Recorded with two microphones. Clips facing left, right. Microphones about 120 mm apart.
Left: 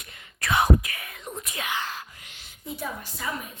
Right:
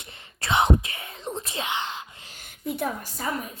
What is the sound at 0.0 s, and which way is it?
Whispering, 30° right (ahead or behind).